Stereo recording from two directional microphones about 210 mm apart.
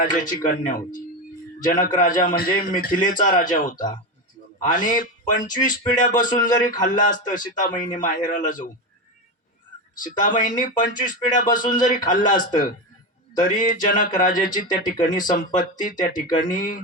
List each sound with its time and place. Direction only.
0.0 s a man's voice: 40° left (ahead or behind)
10.0 s a man's voice: 40° left (ahead or behind)